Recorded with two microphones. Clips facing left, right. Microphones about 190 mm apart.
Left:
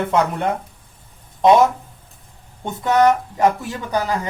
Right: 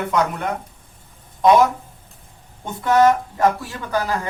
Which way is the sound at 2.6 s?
20° left (ahead or behind).